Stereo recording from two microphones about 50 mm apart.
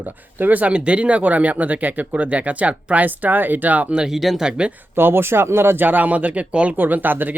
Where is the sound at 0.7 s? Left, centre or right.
Right.